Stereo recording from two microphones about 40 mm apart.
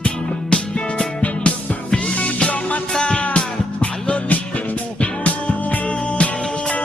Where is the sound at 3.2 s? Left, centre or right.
Left.